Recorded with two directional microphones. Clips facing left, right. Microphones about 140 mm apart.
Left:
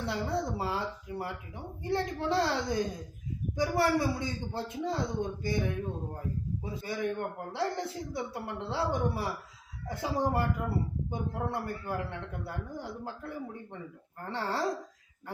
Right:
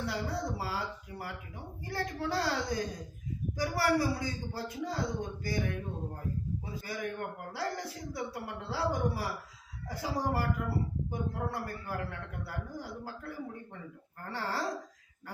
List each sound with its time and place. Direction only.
0.0 s a man's voice: 25° left (ahead or behind)